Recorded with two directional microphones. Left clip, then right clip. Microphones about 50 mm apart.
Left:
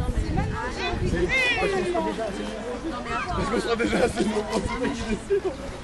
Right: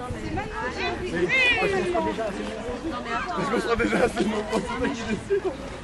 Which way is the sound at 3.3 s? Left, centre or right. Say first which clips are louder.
Right 1 dB; right.